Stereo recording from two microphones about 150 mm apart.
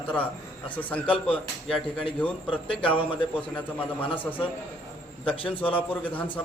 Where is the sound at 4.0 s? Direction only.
35° left (ahead or behind).